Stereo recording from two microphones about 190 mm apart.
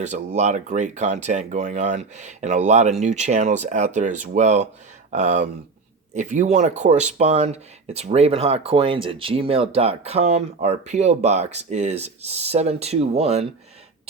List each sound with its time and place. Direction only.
0.3 s speech: 40° right (ahead or behind)